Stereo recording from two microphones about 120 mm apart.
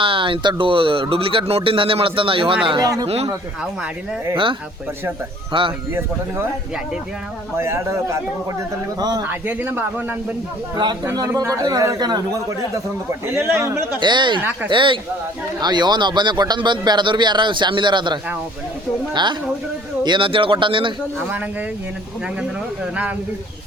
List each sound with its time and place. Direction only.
0.0 s a man's voice: 45° right (ahead or behind)
2.6 s a man's voice: 35° right (ahead or behind)
5.5 s a man's voice: 45° right (ahead or behind)
5.9 s a man's voice: 20° right (ahead or behind)
7.5 s a man's voice: 20° right (ahead or behind)
9.0 s a man's voice: 35° right (ahead or behind)
9.2 s speech: 15° right (ahead or behind)
10.8 s a man's voice: 35° right (ahead or behind)
14.0 s a man's voice: 40° right (ahead or behind)
21.2 s speech: 15° right (ahead or behind)